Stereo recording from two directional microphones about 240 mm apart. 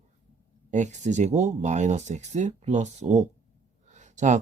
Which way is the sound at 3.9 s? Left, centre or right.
Right.